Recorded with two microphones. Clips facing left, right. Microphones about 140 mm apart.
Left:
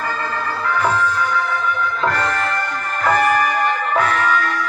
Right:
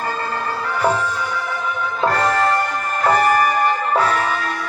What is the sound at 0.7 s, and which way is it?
Music, 30° right (ahead or behind).